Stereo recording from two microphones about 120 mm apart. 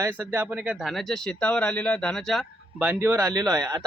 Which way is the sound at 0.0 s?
15° right (ahead or behind).